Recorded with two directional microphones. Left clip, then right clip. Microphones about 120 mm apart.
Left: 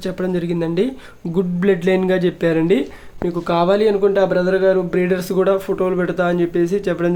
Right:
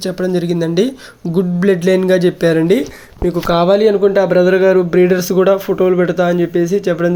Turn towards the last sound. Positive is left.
turn(degrees=-15)  # may be behind; listen again after turning